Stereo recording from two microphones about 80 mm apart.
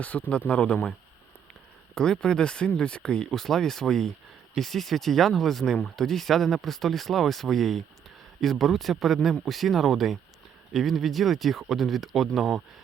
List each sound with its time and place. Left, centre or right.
0.0 s speech: centre
2.0 s speech: centre